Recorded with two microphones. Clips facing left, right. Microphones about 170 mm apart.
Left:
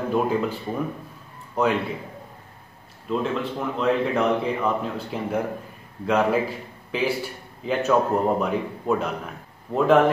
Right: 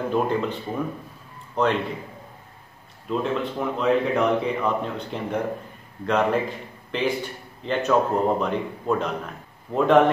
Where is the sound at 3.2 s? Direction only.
Centre (ahead or behind).